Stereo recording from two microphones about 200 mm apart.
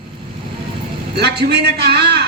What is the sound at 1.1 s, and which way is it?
A man's voice, 55° right (ahead or behind).